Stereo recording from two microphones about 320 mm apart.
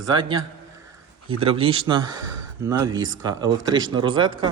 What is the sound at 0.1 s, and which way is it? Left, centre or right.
A man's voice, centre.